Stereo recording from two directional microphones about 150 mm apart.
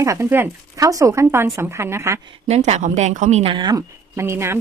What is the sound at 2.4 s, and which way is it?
A woman's voice, 45° right (ahead or behind).